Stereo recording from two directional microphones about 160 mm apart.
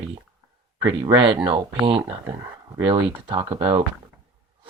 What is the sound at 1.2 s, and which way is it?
Speech, 30° right (ahead or behind).